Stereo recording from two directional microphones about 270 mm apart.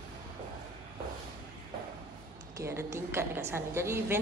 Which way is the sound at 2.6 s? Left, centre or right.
Centre.